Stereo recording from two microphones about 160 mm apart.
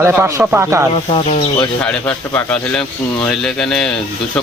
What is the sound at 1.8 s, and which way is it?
Speech, 10° left (ahead or behind).